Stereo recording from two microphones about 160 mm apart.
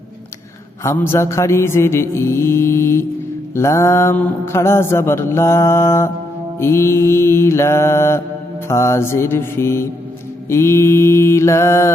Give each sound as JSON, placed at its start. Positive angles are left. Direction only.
{"t": 0.9, "sound": "mantra", "side_deg": 15}